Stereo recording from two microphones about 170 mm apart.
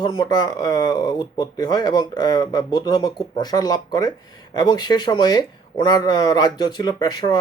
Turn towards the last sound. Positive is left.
turn(degrees=25)  # may be behind; listen again after turning